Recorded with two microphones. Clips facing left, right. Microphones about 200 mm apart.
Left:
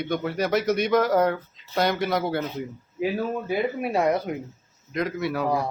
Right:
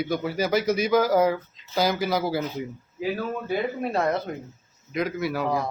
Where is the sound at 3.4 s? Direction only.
10° left (ahead or behind).